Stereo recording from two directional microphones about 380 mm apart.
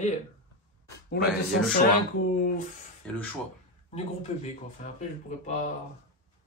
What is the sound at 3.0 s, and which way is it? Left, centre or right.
Speech, centre.